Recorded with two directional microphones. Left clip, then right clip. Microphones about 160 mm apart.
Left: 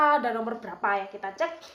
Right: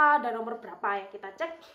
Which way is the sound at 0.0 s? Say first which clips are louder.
Left 1 dB; centre (ahead or behind).